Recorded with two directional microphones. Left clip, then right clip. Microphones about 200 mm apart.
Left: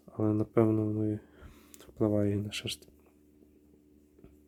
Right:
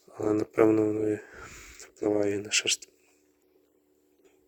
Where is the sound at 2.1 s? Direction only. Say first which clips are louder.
Right 5 dB; 10° right (ahead or behind).